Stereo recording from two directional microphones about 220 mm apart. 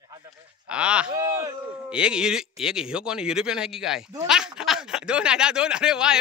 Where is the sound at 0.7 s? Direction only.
5° right (ahead or behind).